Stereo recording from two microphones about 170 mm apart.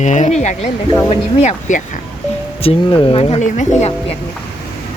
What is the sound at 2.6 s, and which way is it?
Speech, 30° left (ahead or behind).